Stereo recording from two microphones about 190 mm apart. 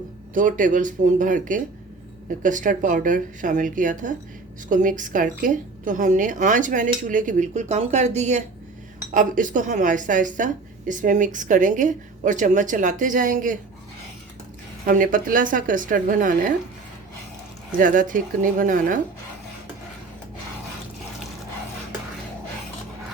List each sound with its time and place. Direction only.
0.3 s a woman's voice: 45° right (ahead or behind)
14.8 s a woman's voice: 45° right (ahead or behind)
17.7 s a woman's voice: 45° right (ahead or behind)